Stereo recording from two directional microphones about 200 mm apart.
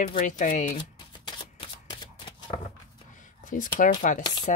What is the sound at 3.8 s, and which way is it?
Speech, 40° left (ahead or behind).